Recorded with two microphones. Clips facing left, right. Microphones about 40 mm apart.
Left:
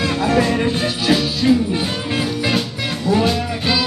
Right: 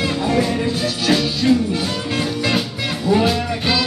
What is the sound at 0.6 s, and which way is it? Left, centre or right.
Music, left.